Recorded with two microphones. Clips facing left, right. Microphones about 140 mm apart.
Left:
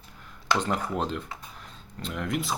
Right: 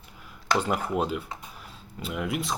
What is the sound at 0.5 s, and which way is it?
Speech, 5° right (ahead or behind).